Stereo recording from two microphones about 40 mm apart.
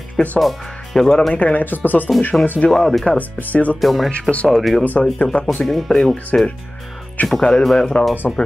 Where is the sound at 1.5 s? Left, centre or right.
Left.